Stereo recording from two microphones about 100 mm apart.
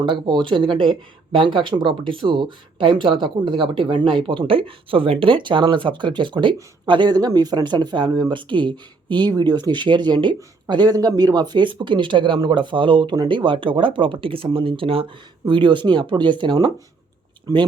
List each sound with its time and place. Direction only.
0.0 s speech: 55° right (ahead or behind)